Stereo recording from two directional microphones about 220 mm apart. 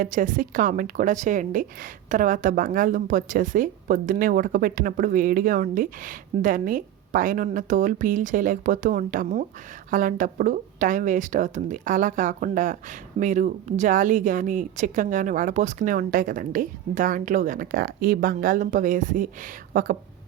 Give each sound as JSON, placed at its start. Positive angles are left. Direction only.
{"t": 0.0, "sound": "a woman's voice", "side_deg": -35}